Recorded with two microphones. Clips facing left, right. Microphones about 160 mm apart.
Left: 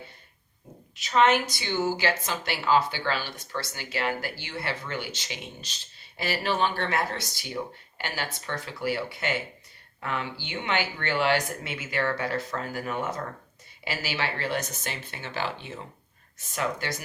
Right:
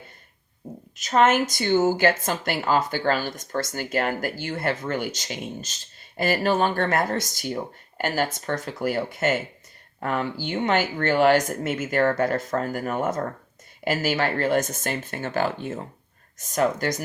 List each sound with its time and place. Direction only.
0.9 s a woman's voice: 45° right (ahead or behind)